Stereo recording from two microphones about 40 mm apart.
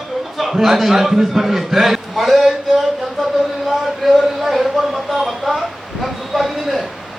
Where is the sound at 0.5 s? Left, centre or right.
Centre.